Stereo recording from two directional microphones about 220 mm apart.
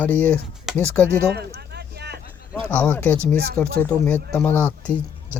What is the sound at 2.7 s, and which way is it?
Speech, 5° left (ahead or behind).